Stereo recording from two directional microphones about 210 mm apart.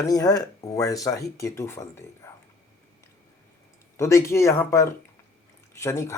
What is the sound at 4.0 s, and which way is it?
Speech, 15° left (ahead or behind).